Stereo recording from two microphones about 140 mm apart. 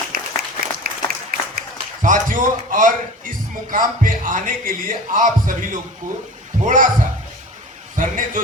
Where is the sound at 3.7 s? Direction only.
75° right (ahead or behind).